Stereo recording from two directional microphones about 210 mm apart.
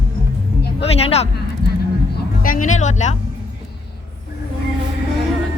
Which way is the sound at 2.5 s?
35° left (ahead or behind).